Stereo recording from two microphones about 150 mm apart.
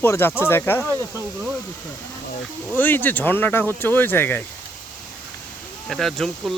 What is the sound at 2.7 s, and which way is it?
Speech, 10° left (ahead or behind).